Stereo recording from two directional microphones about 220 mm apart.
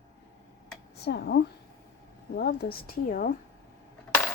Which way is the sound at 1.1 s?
50° left (ahead or behind).